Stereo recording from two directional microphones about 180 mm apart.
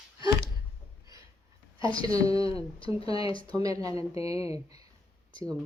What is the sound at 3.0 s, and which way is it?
Speech, 20° right (ahead or behind).